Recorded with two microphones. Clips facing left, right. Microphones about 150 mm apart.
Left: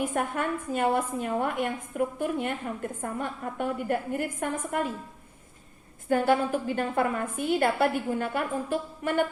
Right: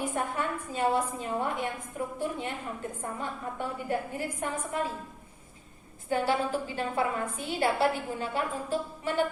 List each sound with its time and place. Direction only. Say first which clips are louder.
0.0 s a woman's voice: left 3 dB; 55° left (ahead or behind)
6.1 s a woman's voice: left 4 dB; 50° left (ahead or behind)